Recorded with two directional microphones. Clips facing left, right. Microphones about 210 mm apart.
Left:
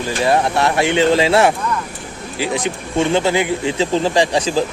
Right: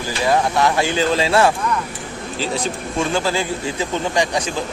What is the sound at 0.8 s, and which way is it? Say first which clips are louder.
Speech: left 4 dB; 25° left (ahead or behind).